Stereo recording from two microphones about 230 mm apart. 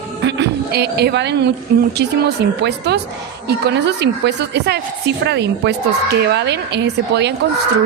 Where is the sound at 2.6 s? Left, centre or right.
Right.